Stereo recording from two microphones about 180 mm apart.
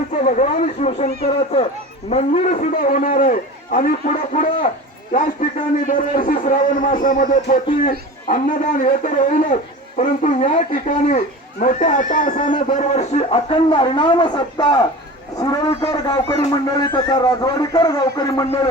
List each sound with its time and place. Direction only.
0.2 s a man's voice: 40° left (ahead or behind); by 18.4 s 20° left (ahead or behind)